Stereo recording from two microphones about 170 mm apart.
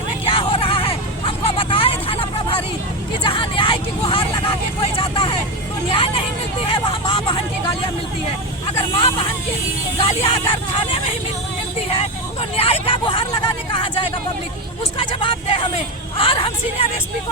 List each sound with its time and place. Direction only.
0.3 s vehicle: 30° left (ahead or behind)
3.2 s vehicle: 30° left (ahead or behind)
9.0 s vehicle: 35° left (ahead or behind)
12.4 s vehicle: 35° left (ahead or behind)
14.9 s hubbub: 30° left (ahead or behind)